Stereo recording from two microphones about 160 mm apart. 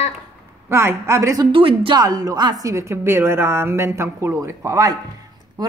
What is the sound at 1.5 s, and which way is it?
A woman's voice, 35° right (ahead or behind).